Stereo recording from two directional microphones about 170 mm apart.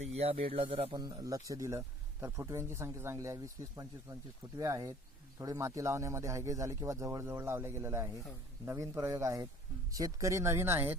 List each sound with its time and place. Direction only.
0.0 s speech: 40° right (ahead or behind)
0.9 s speech: 20° right (ahead or behind)